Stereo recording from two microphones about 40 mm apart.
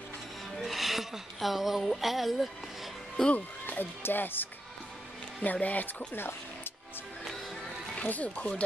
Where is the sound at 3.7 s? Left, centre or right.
Left.